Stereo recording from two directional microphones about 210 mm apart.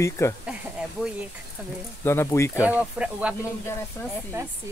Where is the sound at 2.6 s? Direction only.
5° right (ahead or behind).